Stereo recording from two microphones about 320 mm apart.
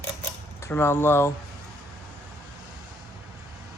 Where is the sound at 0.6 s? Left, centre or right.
Centre.